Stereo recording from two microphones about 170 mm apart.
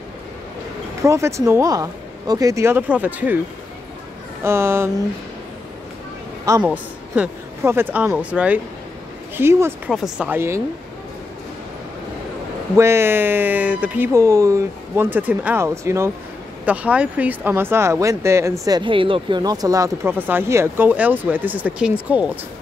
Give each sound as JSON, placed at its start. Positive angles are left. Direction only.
{"t": 1.0, "sound": "speech", "side_deg": -15}
{"t": 4.4, "sound": "speech", "side_deg": -15}
{"t": 6.6, "sound": "speech", "side_deg": -10}
{"t": 9.8, "sound": "speech", "side_deg": -5}
{"t": 12.7, "sound": "speech", "side_deg": -15}